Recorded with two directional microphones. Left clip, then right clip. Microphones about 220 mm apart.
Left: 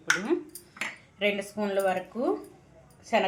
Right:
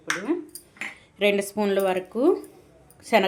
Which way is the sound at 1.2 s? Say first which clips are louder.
Right 6 dB; 45° right (ahead or behind).